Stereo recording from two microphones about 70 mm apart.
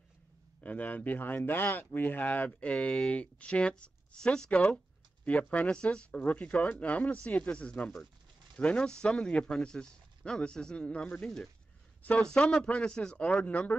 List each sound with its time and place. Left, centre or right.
0.6 s a man's voice: left